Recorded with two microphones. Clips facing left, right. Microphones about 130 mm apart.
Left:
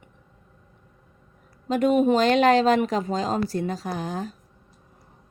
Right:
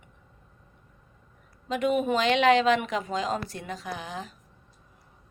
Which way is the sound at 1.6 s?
40° left (ahead or behind).